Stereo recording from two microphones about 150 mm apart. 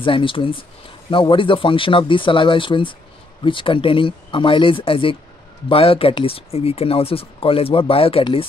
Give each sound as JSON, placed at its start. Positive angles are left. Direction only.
{"t": 0.0, "sound": "speech", "side_deg": 35}